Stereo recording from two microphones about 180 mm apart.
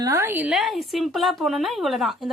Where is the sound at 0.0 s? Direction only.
15° right (ahead or behind).